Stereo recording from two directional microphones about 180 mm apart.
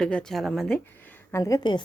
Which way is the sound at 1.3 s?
15° left (ahead or behind).